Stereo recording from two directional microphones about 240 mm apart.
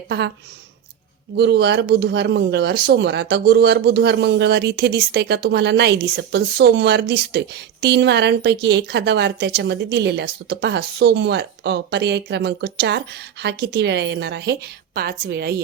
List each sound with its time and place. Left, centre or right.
1.4 s a woman's voice: right